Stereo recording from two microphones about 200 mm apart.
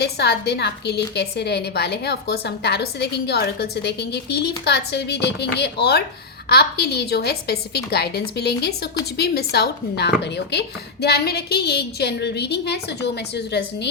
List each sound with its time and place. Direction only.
0.0 s a woman's voice: 55° left (ahead or behind)